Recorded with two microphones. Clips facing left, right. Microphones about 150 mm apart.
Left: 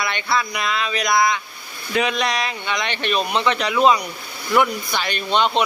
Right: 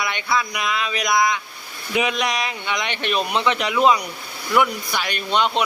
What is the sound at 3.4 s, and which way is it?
Speech, 15° right (ahead or behind).